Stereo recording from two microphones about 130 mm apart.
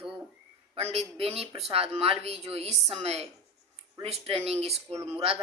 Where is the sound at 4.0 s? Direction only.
50° right (ahead or behind).